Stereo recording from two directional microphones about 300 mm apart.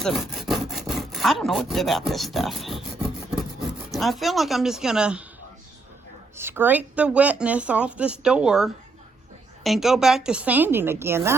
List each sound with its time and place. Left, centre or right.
0.0 s wood: centre
3.9 s speech: centre
6.3 s speech: centre